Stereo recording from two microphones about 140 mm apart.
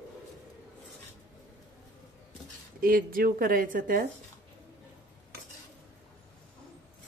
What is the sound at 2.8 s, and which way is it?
Speech, 90° right.